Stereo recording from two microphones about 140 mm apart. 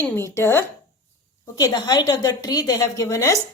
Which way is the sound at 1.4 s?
30° left (ahead or behind).